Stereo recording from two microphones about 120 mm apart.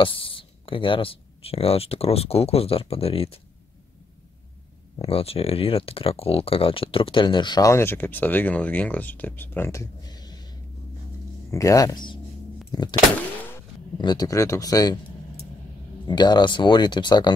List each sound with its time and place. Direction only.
0.0 s speech: 45° left (ahead or behind)
4.9 s speech: 55° left (ahead or behind); by 7.7 s 35° left (ahead or behind)
7.7 s speech: 20° left (ahead or behind); by 10.5 s 35° left (ahead or behind)
11.5 s speech: 30° left (ahead or behind)
13.9 s speech: 35° left (ahead or behind)
16.1 s speech: 35° left (ahead or behind)